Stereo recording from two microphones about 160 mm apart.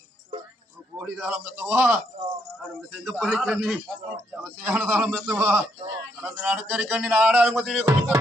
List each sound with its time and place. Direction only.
1.5 s music: 15° right (ahead or behind)
2.1 s speech: 30° right (ahead or behind)
2.9 s music: 10° right (ahead or behind)
3.4 s a man's voice: 5° right (ahead or behind)
4.7 s music: centre (ahead or behind)